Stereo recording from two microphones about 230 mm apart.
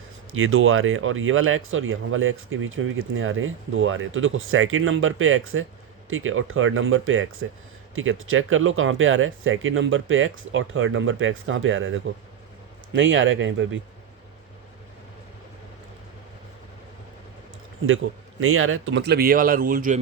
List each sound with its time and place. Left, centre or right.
0.3 s speech: right
17.8 s speech: right